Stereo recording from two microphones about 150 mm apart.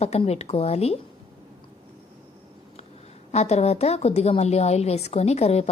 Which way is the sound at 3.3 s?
45° left (ahead or behind).